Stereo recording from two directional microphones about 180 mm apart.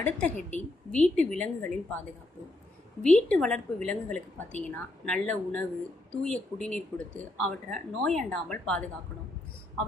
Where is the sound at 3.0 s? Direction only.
5° left (ahead or behind).